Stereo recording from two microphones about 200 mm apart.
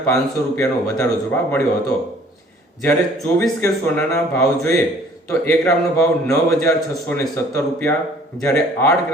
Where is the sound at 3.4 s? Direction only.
10° left (ahead or behind).